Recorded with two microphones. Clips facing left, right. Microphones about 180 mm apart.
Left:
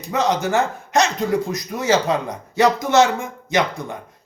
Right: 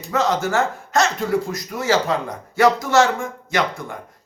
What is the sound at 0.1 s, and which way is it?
Speech, 15° left (ahead or behind).